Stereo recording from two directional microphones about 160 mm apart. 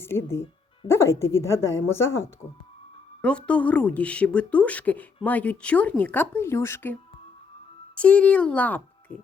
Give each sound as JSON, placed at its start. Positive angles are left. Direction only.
{"t": 0.0, "sound": "speech", "side_deg": 15}
{"t": 7.9, "sound": "speech", "side_deg": 10}